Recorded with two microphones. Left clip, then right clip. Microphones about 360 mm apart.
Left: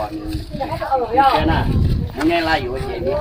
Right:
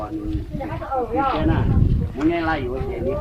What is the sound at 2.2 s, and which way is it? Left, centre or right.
Speech, centre.